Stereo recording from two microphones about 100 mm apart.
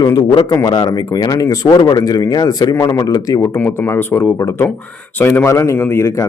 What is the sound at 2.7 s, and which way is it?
Speech, 30° left (ahead or behind).